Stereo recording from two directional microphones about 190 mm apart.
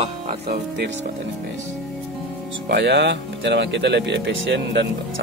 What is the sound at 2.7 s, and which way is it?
Speech, 65° right (ahead or behind).